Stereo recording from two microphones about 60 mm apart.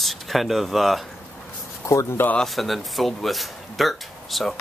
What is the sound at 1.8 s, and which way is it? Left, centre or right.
Speech, left.